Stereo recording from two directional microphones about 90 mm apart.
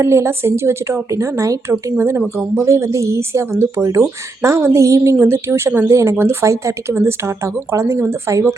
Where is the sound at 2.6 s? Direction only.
35° right (ahead or behind).